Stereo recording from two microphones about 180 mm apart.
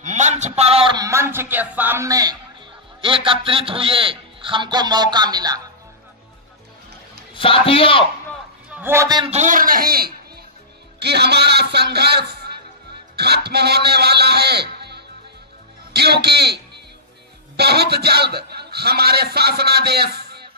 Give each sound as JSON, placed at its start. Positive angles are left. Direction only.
{"t": 0.0, "sound": "a man's voice", "side_deg": -40}
{"t": 7.3, "sound": "a man's voice", "side_deg": 30}
{"t": 8.6, "sound": "a man's voice", "side_deg": -10}
{"t": 9.3, "sound": "a man's voice", "side_deg": -45}
{"t": 11.0, "sound": "a man's voice", "side_deg": -65}